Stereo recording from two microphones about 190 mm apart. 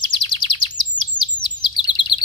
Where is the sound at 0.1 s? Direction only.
25° left (ahead or behind).